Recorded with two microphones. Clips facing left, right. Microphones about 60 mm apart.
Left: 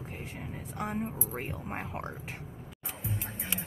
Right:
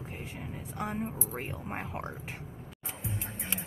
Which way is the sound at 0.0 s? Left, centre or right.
Centre.